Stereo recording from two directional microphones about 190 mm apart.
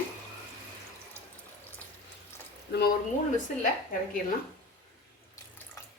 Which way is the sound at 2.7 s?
60° left (ahead or behind).